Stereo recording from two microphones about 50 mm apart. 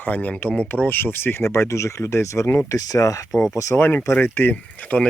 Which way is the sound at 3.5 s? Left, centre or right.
Left.